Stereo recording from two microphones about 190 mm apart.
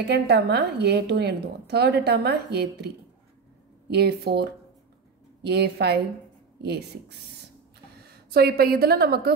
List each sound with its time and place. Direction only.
0.0 s a woman's voice: 60° right (ahead or behind)
3.9 s a woman's voice: 60° right (ahead or behind)
8.3 s a woman's voice: 55° right (ahead or behind)